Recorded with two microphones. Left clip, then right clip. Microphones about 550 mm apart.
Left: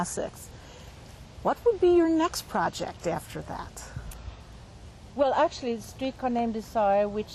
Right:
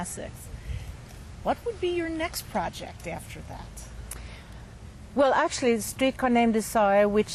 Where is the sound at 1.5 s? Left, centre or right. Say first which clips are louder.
Left 6 dB; left.